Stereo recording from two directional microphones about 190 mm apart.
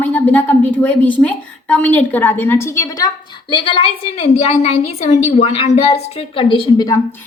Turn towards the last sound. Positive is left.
turn(degrees=25)  # may be behind; listen again after turning